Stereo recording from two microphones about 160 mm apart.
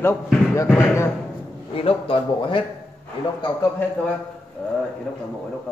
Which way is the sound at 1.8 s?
35° left (ahead or behind).